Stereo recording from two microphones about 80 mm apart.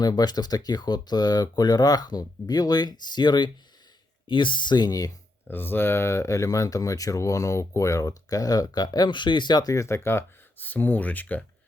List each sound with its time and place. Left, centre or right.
0.0 s speech: left
4.3 s speech: left
5.5 s speech: left
9.7 s speech: left